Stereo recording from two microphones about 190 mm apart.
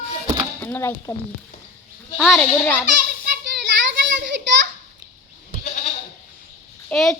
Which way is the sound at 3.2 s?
60° right (ahead or behind).